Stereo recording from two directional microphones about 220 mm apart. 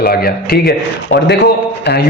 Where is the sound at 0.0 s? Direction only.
45° left (ahead or behind).